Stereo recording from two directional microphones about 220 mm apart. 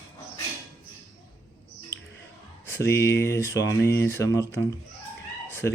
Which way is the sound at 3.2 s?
10° left (ahead or behind).